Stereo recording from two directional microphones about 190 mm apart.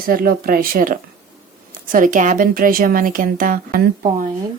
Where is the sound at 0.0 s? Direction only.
50° right (ahead or behind).